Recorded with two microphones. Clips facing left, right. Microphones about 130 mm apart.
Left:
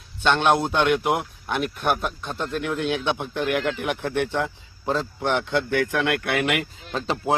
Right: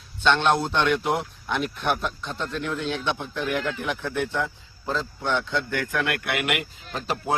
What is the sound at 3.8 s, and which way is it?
Speech, 70° left (ahead or behind).